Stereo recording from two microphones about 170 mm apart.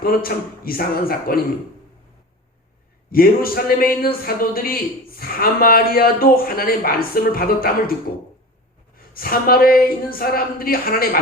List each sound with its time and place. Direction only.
0.0 s a woman's voice: 60° left (ahead or behind)
3.1 s a woman's voice: 60° left (ahead or behind)
9.0 s a woman's voice: 60° left (ahead or behind)